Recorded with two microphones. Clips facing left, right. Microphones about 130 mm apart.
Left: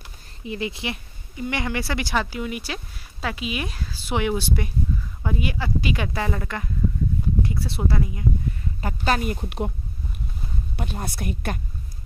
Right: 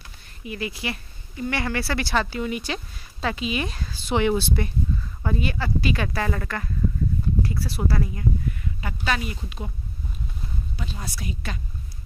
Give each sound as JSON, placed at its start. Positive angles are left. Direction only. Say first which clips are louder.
{"t": 0.4, "sound": "speech", "louder": "left 2 dB", "side_deg": 25}
{"t": 8.8, "sound": "a woman's voice", "louder": "left 4 dB", "side_deg": 40}
{"t": 10.8, "sound": "speech", "louder": "left 6 dB", "side_deg": 55}